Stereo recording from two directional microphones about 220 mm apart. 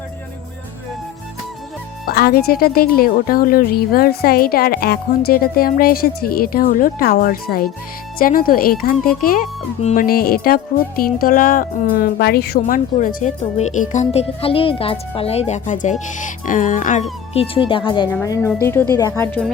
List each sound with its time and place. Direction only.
2.0 s a woman's voice: 45° left (ahead or behind); by 19.5 s 10° left (ahead or behind)